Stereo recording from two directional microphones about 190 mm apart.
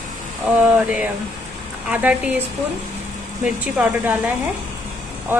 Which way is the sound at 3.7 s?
10° right (ahead or behind).